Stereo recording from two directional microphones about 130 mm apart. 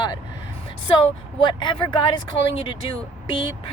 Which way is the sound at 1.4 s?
40° left (ahead or behind).